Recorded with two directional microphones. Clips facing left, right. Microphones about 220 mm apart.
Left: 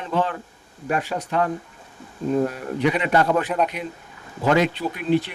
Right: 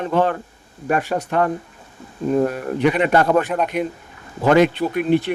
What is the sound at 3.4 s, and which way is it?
Speech, centre (ahead or behind).